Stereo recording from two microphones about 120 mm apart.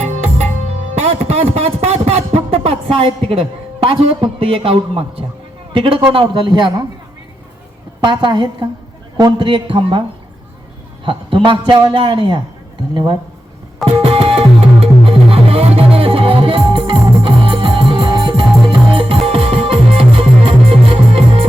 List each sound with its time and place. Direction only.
0.0 s music: 70° right (ahead or behind); by 5.2 s 50° right (ahead or behind)
5.7 s a man's voice: 45° right (ahead or behind)
8.0 s a man's voice: 40° right (ahead or behind)
11.0 s a man's voice: 45° right (ahead or behind)
13.8 s music: 50° right (ahead or behind)